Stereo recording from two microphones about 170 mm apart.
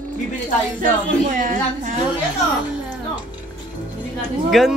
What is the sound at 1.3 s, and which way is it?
Speech, 45° right (ahead or behind).